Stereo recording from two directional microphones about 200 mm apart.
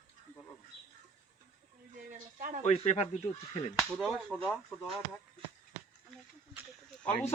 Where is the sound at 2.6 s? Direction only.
35° left (ahead or behind).